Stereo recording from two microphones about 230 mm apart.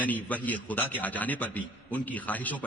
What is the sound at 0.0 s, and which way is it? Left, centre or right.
A man's voice, centre.